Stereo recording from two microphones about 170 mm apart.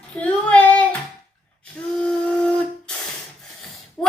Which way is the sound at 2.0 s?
5° left (ahead or behind).